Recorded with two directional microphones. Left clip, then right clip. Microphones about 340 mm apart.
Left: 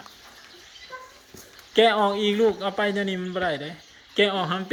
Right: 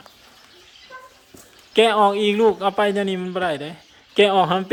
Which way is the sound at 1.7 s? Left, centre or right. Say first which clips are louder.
Right 4 dB; centre.